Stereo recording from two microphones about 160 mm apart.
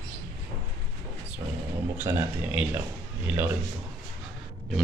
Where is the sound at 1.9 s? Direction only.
10° right (ahead or behind).